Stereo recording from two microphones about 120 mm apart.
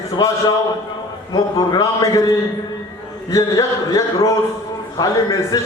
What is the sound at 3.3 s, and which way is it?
A man's voice, 30° left (ahead or behind).